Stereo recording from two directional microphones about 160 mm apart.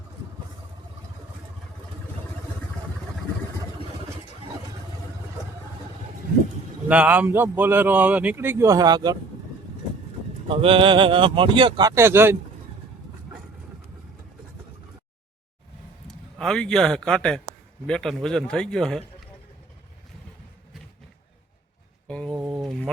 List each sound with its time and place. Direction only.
6.8 s speech: 10° right (ahead or behind); by 9.1 s 25° right (ahead or behind)
10.5 s speech: 35° right (ahead or behind); by 12.4 s 15° right (ahead or behind)
16.0 s a man's voice: 5° left (ahead or behind)
22.0 s a sound: 5° left (ahead or behind)